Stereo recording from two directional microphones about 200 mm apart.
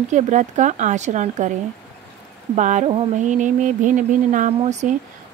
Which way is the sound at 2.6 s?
35° right (ahead or behind).